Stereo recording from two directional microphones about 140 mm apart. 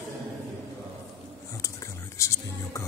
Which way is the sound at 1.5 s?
20° left (ahead or behind).